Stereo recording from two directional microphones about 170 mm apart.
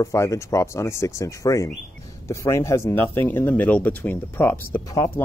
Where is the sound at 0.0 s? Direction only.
15° left (ahead or behind).